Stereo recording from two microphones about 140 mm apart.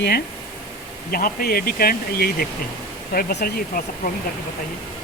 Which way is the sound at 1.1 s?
90° left.